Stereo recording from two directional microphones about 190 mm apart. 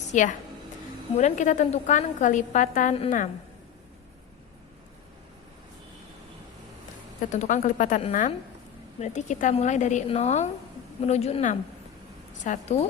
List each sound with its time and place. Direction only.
0.1 s a woman's voice: 40° left (ahead or behind)
7.3 s a woman's voice: 40° left (ahead or behind)